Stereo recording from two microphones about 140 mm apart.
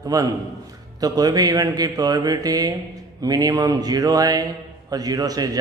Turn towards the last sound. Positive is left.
turn(degrees=-25)  # may be behind; listen again after turning